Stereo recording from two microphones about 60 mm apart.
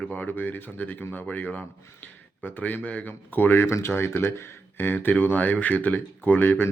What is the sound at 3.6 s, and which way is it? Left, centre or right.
A man's voice, left.